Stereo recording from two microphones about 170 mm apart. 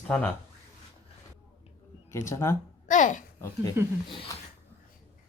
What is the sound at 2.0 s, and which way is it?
Speech, 15° left (ahead or behind).